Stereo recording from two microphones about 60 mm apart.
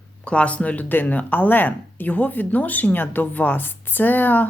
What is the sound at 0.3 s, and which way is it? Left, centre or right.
Speech, left.